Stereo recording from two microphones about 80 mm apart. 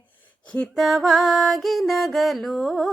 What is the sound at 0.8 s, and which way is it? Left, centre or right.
Music, centre.